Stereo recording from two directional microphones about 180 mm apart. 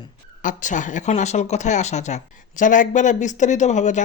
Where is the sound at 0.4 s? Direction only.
45° left (ahead or behind).